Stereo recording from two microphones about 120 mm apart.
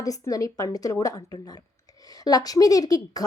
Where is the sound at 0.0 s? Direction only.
30° left (ahead or behind).